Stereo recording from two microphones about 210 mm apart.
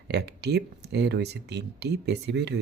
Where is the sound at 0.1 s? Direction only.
50° right (ahead or behind).